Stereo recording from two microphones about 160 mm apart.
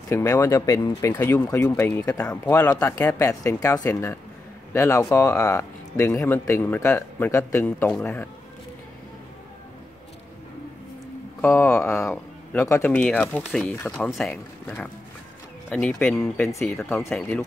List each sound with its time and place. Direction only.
0.1 s speech: 15° left (ahead or behind)
2.0 s speech: 20° left (ahead or behind)
2.2 s speech: 10° left (ahead or behind)
3.8 s speech: 10° left (ahead or behind)
11.4 s speech: 10° left (ahead or behind)